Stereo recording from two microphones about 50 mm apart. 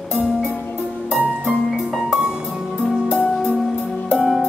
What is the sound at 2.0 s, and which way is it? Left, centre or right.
Music, centre.